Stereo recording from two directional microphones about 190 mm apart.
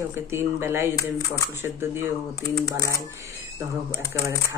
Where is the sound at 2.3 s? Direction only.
20° left (ahead or behind).